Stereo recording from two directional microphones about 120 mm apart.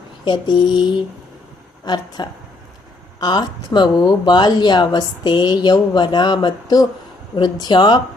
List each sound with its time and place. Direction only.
0.3 s speech: 40° left (ahead or behind)